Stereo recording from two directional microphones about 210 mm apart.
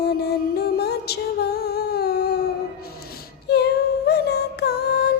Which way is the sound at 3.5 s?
50° left (ahead or behind).